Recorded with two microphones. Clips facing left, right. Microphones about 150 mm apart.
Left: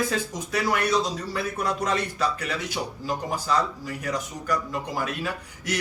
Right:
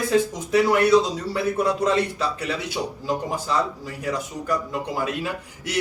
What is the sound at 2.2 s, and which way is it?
A man's voice, 25° right (ahead or behind).